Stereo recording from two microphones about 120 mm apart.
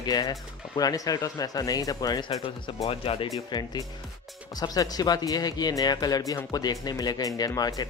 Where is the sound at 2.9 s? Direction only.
50° left (ahead or behind).